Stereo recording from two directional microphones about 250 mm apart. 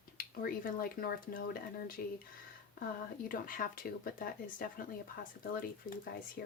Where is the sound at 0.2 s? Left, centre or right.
Left.